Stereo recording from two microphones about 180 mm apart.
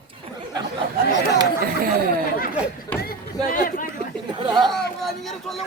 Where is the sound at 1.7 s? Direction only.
55° right (ahead or behind).